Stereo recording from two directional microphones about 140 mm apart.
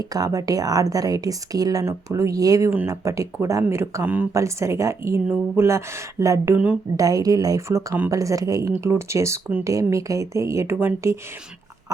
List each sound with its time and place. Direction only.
0.0 s speech: 25° right (ahead or behind)